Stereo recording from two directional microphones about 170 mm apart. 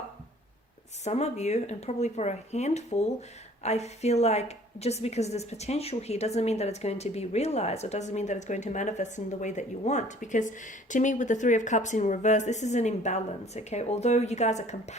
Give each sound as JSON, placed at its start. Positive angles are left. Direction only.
{"t": 1.0, "sound": "speech", "side_deg": 40}